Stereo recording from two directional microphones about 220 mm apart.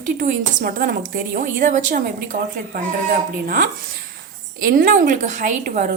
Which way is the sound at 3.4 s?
40° right (ahead or behind).